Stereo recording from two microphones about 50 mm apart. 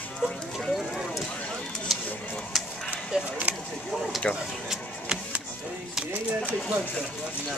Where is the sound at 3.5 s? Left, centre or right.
Right.